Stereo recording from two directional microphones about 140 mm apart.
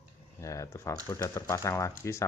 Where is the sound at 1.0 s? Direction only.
25° left (ahead or behind).